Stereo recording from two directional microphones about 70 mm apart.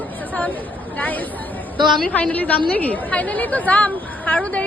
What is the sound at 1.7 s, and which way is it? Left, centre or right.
Speech, right.